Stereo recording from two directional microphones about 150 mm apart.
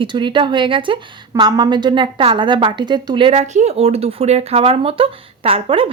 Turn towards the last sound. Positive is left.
turn(degrees=-35)  # may be behind; listen again after turning